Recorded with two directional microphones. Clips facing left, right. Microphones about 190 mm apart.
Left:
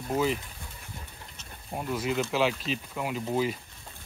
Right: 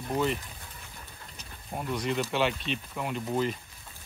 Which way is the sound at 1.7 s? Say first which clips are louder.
Left 1 dB; 5° left (ahead or behind).